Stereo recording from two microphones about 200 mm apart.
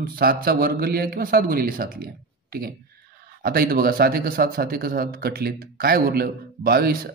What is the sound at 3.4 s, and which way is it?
Speech, 50° right (ahead or behind).